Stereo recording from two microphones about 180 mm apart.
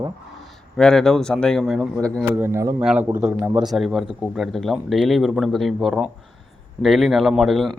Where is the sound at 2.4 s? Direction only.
15° right (ahead or behind).